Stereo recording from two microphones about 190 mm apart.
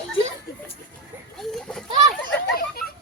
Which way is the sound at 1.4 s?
Centre (ahead or behind).